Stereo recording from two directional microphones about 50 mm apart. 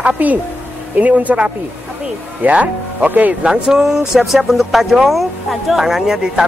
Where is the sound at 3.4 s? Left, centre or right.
Centre.